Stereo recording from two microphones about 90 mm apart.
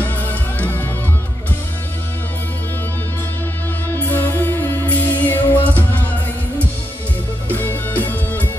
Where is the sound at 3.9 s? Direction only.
20° left (ahead or behind).